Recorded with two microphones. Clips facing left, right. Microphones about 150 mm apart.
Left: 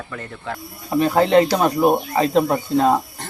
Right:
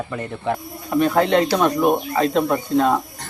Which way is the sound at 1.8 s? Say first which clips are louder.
Left 1 dB; 35° left (ahead or behind).